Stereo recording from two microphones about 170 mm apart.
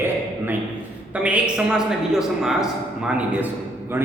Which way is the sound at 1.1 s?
10° right (ahead or behind).